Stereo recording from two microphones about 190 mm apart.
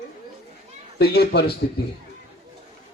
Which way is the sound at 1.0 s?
60° left (ahead or behind).